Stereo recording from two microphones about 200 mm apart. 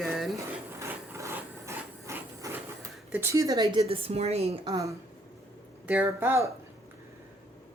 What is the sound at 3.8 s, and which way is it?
Speech, 30° right (ahead or behind).